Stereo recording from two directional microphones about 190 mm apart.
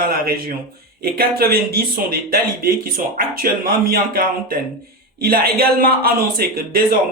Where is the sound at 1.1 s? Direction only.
50° right (ahead or behind).